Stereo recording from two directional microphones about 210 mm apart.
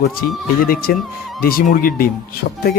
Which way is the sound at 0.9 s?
45° left (ahead or behind).